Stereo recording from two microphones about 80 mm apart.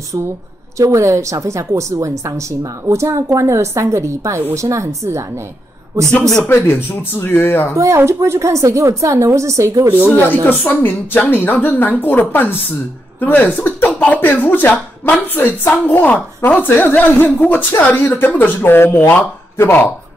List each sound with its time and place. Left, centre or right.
0.7 s a woman's voice: right
6.5 s speech: left
7.7 s a woman's voice: right
10.1 s speech: left